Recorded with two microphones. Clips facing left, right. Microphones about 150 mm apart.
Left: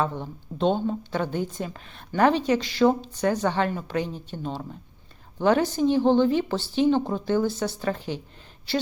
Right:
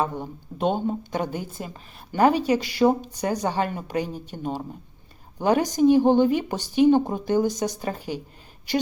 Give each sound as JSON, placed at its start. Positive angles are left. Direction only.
{"t": 0.0, "sound": "a woman's voice", "side_deg": -10}